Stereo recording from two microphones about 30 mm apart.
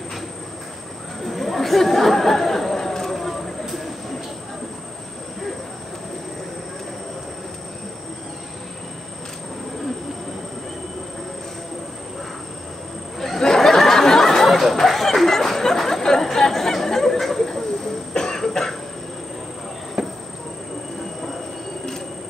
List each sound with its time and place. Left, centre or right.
1.2 s chatter: centre
13.4 s a sound: centre
16.0 s chatter: centre
18.1 s cough: centre
20.0 s insect: centre